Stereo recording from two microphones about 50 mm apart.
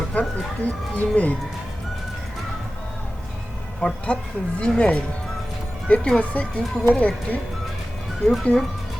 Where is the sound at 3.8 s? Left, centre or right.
Centre.